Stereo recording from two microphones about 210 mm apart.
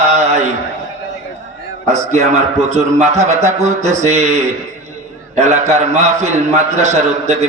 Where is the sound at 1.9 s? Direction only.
30° right (ahead or behind).